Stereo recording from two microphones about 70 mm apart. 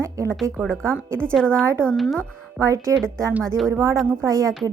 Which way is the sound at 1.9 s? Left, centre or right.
Centre.